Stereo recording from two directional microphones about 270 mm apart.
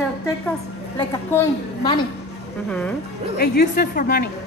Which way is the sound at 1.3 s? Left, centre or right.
Centre.